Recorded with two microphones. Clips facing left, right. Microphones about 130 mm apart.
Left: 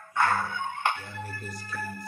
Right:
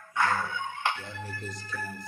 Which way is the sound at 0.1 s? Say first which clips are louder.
Left 2 dB; 50° left (ahead or behind).